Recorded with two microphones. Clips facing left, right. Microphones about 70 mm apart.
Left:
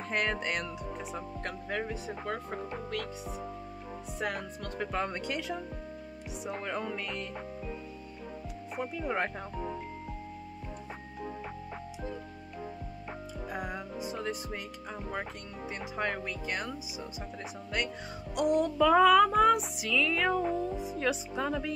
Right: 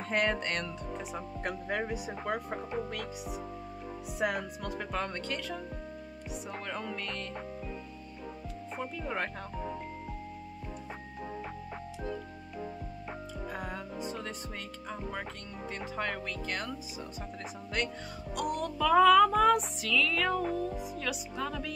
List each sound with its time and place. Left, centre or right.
0.1 s speech: centre
1.4 s speech: centre
4.9 s speech: centre
6.6 s speech: centre
8.7 s speech: centre
13.5 s music: centre
15.8 s speech: centre
18.3 s speech: left